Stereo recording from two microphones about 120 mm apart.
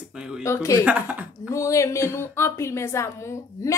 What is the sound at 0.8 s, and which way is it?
Speech, 15° right (ahead or behind).